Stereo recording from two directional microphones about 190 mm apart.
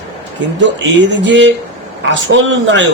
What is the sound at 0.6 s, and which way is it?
A man's voice, 70° right (ahead or behind).